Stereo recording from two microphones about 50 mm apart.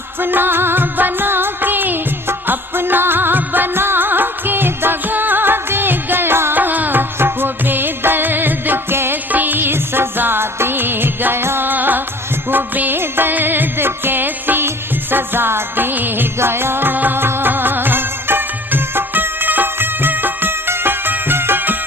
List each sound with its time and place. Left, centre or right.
0.2 s music: right
6.6 s music: right
7.2 s music: right
9.3 s music: right